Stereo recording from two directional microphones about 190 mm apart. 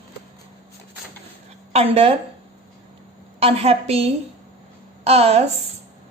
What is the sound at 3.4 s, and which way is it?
A woman's voice, 30° right (ahead or behind).